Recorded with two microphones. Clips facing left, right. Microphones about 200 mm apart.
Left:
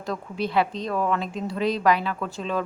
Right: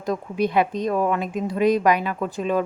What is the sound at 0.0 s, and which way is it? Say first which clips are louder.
Speech: right 5 dB; 15° right (ahead or behind).